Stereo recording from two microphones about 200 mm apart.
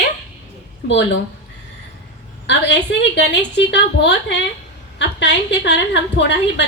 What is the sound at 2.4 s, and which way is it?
A woman's voice, 60° left (ahead or behind).